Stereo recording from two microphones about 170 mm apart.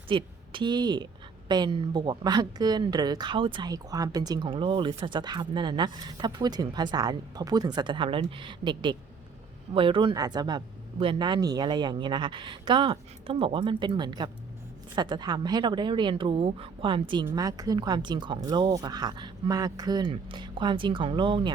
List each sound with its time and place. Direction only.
0.1 s a woman's voice: 30° right (ahead or behind)